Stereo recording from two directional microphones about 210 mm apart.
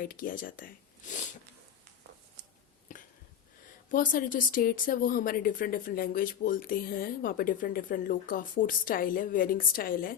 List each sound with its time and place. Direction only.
0.0 s speech: 45° left (ahead or behind)
2.9 s a sound: 40° left (ahead or behind)
3.9 s speech: 40° left (ahead or behind)